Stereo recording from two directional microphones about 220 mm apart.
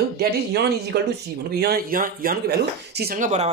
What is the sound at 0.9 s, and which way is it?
Speech, 45° right (ahead or behind).